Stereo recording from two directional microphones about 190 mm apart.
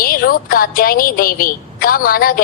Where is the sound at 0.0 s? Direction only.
50° left (ahead or behind).